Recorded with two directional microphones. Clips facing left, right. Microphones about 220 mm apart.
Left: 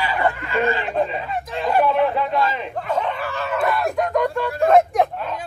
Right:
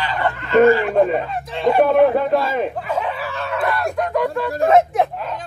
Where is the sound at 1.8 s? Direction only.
50° right (ahead or behind).